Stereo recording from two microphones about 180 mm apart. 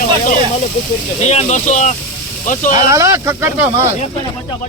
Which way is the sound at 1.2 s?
40° left (ahead or behind).